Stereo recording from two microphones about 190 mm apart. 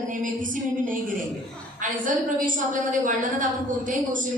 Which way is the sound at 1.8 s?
45° right (ahead or behind).